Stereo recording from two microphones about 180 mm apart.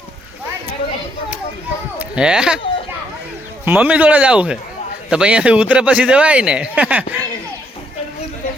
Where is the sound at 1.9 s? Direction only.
5° right (ahead or behind).